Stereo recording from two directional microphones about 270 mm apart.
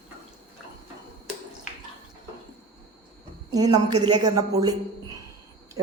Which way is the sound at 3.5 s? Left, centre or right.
Centre.